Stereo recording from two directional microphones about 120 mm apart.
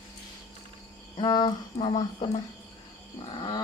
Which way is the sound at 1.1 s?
40° left (ahead or behind).